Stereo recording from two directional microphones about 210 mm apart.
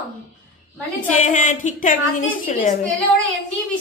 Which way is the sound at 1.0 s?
35° left (ahead or behind).